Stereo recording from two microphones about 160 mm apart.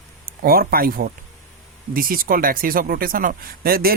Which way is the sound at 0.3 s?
65° right (ahead or behind).